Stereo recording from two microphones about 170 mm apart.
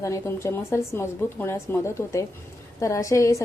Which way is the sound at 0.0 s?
15° left (ahead or behind).